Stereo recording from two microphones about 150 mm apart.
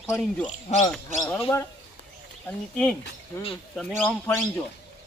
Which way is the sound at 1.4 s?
15° left (ahead or behind).